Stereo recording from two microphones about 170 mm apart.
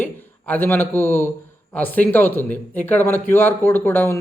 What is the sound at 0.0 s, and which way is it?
A man's voice, 10° left (ahead or behind).